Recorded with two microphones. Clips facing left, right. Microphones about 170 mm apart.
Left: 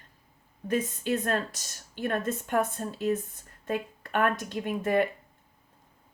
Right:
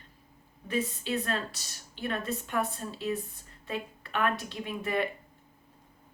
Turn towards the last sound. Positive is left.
turn(degrees=45)  # may be behind; listen again after turning